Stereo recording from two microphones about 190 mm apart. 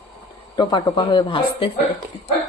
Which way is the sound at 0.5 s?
20° left (ahead or behind).